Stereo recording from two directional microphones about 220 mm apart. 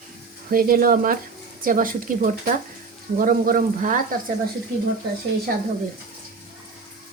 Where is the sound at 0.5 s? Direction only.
40° right (ahead or behind).